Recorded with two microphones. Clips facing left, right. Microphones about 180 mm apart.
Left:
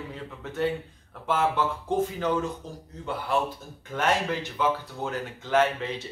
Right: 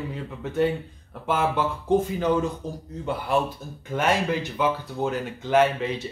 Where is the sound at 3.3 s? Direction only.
15° right (ahead or behind).